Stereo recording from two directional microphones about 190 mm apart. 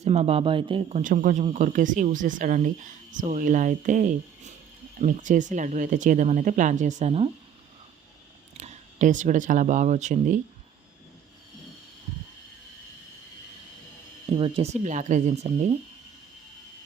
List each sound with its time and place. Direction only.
0.0 s speech: 35° right (ahead or behind)
1.1 s speech: 45° right (ahead or behind)
8.5 s speech: 35° right (ahead or behind)
14.3 s speech: 30° right (ahead or behind)